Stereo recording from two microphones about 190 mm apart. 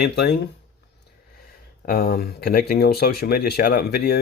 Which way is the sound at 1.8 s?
55° left (ahead or behind).